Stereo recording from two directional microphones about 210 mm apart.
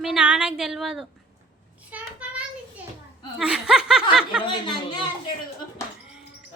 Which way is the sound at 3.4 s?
5° right (ahead or behind).